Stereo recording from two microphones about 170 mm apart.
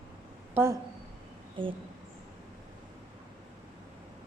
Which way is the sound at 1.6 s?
30° right (ahead or behind).